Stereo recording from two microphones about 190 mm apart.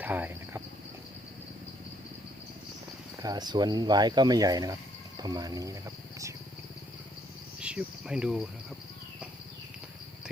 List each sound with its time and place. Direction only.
0.0 s cricket: 10° right (ahead or behind)
3.2 s speech: 20° right (ahead or behind)
7.6 s speech: 5° right (ahead or behind)